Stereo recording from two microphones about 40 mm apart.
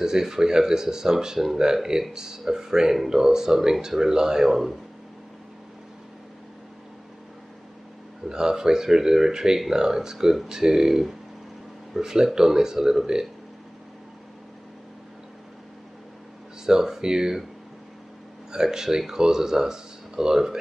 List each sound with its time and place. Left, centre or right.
0.0 s speech: centre
4.5 s speech: centre
8.3 s speech: centre
16.6 s speech: centre
18.5 s speech: centre